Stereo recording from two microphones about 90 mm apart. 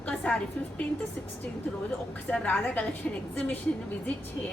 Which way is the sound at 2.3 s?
15° left (ahead or behind).